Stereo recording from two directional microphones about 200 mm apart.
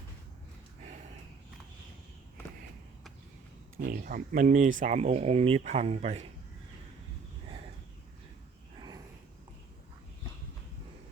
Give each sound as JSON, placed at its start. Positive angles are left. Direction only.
{"t": 3.8, "sound": "speech", "side_deg": -45}